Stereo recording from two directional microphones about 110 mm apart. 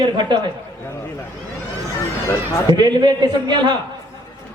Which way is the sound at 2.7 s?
40° right (ahead or behind).